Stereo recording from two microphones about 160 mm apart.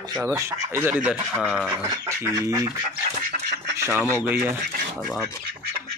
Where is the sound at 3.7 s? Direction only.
15° right (ahead or behind).